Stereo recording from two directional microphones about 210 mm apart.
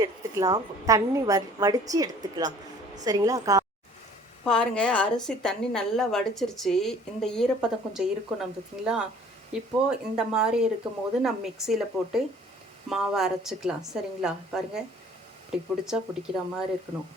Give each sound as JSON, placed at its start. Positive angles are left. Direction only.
{"t": 0.0, "sound": "a woman's voice", "side_deg": -15}
{"t": 4.4, "sound": "a woman's voice", "side_deg": 5}